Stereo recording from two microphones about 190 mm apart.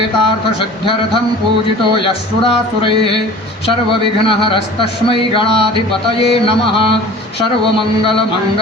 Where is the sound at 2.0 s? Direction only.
30° left (ahead or behind).